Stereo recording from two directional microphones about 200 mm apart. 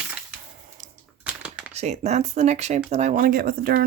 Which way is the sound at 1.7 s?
35° right (ahead or behind).